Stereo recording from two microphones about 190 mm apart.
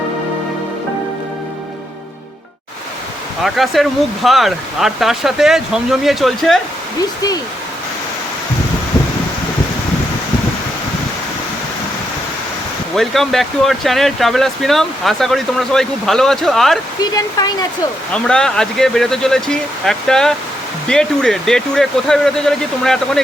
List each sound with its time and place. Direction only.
3.4 s speech: centre (ahead or behind)
13.0 s speech: centre (ahead or behind)
17.0 s speech: 20° left (ahead or behind)
18.1 s speech: 5° left (ahead or behind)